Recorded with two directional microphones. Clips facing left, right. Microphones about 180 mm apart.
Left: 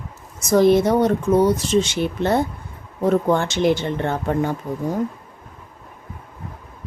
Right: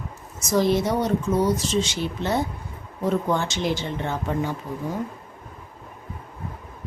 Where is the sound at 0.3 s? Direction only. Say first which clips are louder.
Left 6 dB; 55° left (ahead or behind).